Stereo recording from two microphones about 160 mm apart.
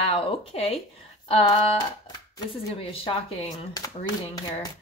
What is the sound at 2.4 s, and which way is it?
Speech, 35° left (ahead or behind).